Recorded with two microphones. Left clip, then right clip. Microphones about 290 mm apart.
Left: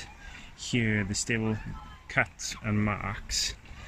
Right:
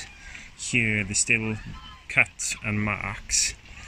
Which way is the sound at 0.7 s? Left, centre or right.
Centre.